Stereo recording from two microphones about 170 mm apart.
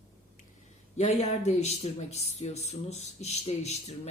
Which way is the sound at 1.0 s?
40° left (ahead or behind).